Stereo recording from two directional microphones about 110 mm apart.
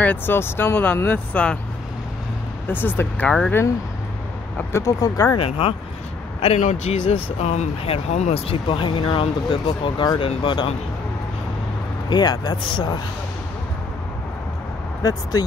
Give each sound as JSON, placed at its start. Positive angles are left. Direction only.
{"t": 0.0, "sound": "speech", "side_deg": 15}
{"t": 2.7, "sound": "speech", "side_deg": 20}
{"t": 4.7, "sound": "speech", "side_deg": 30}
{"t": 5.4, "sound": "speech", "side_deg": 55}
{"t": 6.4, "sound": "speech", "side_deg": 80}
{"t": 12.1, "sound": "speech", "side_deg": 40}
{"t": 15.0, "sound": "speech", "side_deg": 35}